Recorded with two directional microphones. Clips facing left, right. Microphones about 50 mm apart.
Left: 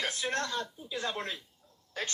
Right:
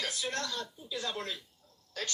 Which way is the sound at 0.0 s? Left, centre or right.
Left.